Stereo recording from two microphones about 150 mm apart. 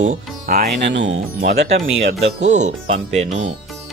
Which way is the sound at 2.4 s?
50° right (ahead or behind).